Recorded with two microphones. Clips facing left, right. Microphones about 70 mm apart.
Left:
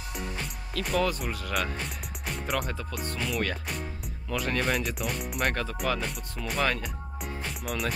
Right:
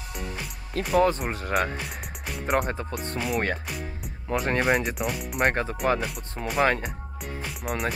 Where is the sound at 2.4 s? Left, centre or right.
Right.